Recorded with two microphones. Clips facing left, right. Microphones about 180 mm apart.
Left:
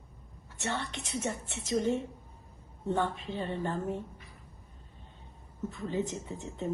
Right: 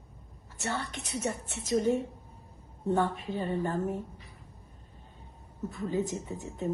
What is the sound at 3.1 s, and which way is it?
Speech, 40° right (ahead or behind).